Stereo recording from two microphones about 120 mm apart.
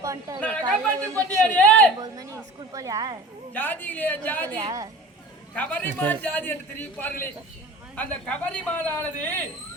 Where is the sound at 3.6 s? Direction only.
15° left (ahead or behind).